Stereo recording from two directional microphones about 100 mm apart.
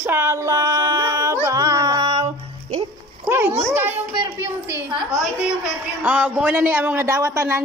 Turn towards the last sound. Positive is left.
turn(degrees=-30)  # may be behind; listen again after turning